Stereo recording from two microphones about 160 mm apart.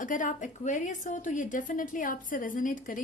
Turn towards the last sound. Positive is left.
turn(degrees=60)  # may be behind; listen again after turning